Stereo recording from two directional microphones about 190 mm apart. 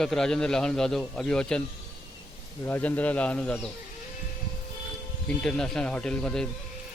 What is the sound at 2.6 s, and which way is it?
A man's voice, 10° left (ahead or behind).